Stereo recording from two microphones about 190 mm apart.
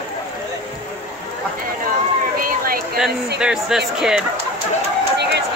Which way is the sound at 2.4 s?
50° right (ahead or behind).